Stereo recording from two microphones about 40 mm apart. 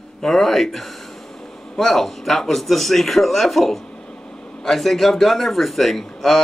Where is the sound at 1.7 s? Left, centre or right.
Centre.